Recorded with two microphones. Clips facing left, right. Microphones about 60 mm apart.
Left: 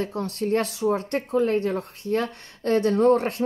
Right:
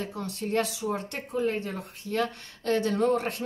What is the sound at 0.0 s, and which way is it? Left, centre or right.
Speech, left.